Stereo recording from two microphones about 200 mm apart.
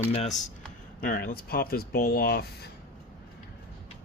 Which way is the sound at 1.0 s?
45° left (ahead or behind).